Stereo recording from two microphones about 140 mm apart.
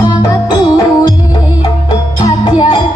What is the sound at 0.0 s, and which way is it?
Music, 25° left (ahead or behind).